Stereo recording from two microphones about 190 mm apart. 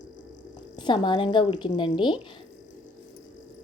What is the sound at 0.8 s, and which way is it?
A woman's voice, 25° left (ahead or behind).